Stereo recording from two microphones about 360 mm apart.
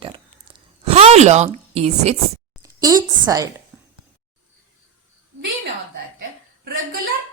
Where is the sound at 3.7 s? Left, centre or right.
Centre.